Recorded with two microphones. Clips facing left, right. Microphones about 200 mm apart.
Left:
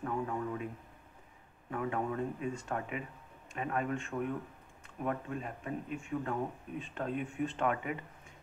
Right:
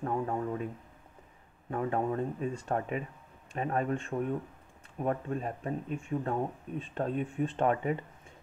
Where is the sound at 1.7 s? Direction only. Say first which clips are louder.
Right 4 dB; 35° right (ahead or behind).